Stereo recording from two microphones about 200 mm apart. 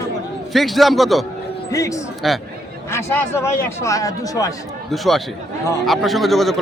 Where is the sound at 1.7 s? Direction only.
15° left (ahead or behind).